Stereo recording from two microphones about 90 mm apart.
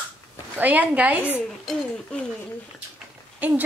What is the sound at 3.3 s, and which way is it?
Speech, 20° right (ahead or behind).